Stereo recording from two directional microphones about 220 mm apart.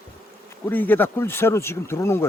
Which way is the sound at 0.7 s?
10° left (ahead or behind).